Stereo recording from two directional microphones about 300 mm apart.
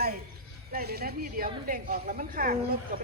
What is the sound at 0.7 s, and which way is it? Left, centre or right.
A woman's voice, right.